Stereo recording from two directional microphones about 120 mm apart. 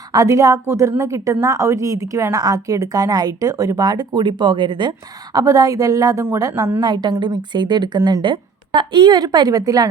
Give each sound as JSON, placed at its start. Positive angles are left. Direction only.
{"t": 0.1, "sound": "a woman's voice", "side_deg": -30}
{"t": 6.7, "sound": "speech", "side_deg": -35}